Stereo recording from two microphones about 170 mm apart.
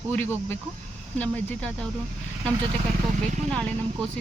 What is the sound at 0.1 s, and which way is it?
Speech, 10° left (ahead or behind).